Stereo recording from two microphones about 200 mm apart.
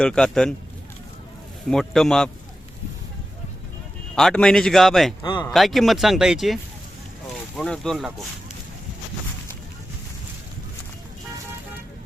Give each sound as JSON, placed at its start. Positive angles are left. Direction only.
{"t": 0.0, "sound": "speech", "side_deg": 5}
{"t": 1.7, "sound": "speech", "side_deg": 0}
{"t": 4.1, "sound": "speech", "side_deg": 5}
{"t": 5.2, "sound": "speech", "side_deg": 20}
{"t": 5.5, "sound": "speech", "side_deg": 0}